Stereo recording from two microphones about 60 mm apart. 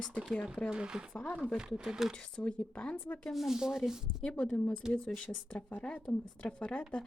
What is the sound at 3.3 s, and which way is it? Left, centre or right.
Sanding, centre.